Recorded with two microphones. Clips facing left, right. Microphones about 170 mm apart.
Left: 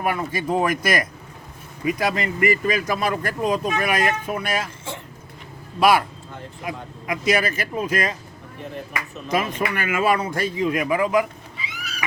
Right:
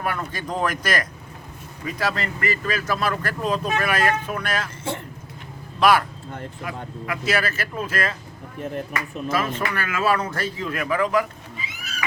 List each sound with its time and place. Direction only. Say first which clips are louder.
0.0 s speech: left 4 dB; 10° left (ahead or behind)
5.8 s speech: left 1 dB; 10° left (ahead or behind)
9.3 s speech: left 2 dB; 10° left (ahead or behind)
11.5 s a sound: left 1 dB; 45° right (ahead or behind)